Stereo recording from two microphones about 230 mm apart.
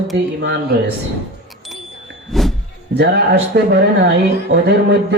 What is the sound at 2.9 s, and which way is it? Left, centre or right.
Speech, right.